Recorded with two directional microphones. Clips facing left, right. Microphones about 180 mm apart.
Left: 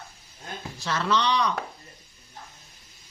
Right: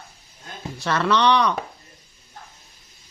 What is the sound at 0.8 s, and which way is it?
Speech, 65° right (ahead or behind).